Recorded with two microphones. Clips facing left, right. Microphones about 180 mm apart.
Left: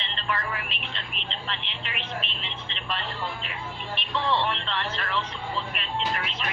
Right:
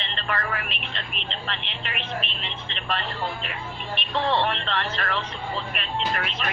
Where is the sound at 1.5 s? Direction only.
70° right (ahead or behind).